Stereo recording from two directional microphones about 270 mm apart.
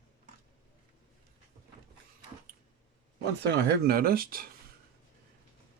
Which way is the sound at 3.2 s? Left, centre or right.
Right.